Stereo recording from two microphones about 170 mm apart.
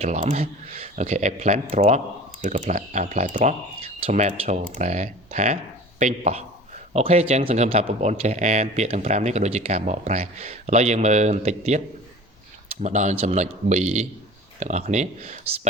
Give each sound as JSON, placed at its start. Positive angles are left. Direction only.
{"t": 0.0, "sound": "speech", "side_deg": -40}
{"t": 12.8, "sound": "speech", "side_deg": -45}